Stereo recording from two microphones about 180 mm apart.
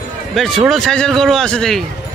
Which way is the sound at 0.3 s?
Centre (ahead or behind).